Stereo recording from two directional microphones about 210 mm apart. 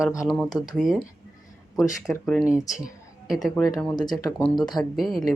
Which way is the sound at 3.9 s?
20° left (ahead or behind).